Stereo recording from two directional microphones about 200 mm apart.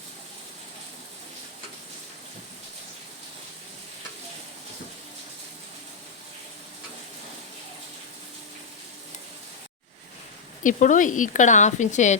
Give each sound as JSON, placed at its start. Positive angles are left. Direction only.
{"t": 10.6, "sound": "speech", "side_deg": 40}